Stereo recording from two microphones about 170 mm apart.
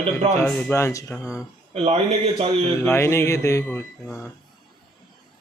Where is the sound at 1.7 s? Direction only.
35° right (ahead or behind).